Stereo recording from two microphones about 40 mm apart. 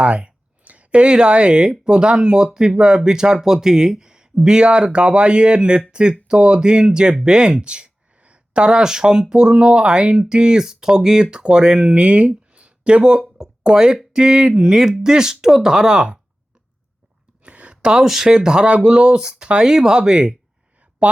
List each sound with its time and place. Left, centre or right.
0.0 s speech: right
0.6 s speech: right
17.4 s a sound: right
18.1 s speech: centre
18.3 s speech: right
19.6 s speech: centre